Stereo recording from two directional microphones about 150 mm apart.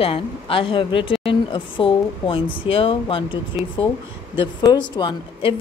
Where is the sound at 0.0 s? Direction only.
40° left (ahead or behind).